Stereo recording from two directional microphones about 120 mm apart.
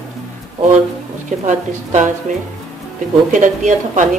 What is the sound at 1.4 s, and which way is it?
Speech, 90° right.